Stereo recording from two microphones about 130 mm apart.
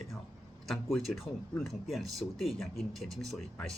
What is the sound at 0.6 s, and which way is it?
Speech, centre (ahead or behind).